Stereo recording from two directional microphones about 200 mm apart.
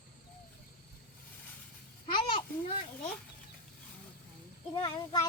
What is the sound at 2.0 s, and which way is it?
Babbling, 25° left (ahead or behind).